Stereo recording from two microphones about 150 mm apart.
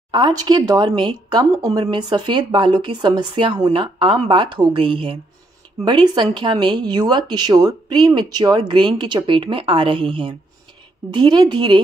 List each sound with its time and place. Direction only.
0.1 s a woman's voice: 30° right (ahead or behind)